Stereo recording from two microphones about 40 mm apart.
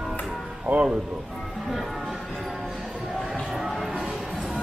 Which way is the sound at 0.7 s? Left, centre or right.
Right.